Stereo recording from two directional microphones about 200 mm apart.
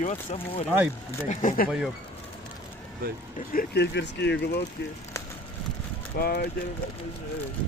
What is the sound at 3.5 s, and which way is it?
Speech, 55° left (ahead or behind).